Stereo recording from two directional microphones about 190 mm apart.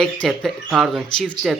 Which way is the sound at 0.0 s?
Centre (ahead or behind).